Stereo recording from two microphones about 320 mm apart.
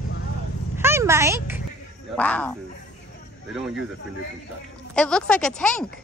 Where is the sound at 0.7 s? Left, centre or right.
Centre.